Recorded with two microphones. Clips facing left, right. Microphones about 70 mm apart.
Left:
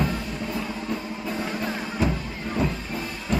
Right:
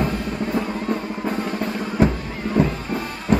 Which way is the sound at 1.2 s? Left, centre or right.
Right.